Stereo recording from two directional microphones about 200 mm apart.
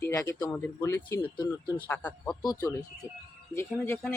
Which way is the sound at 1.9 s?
10° left (ahead or behind).